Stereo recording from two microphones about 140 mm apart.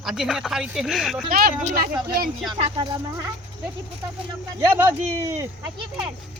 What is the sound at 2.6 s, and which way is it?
Speech, 35° right (ahead or behind).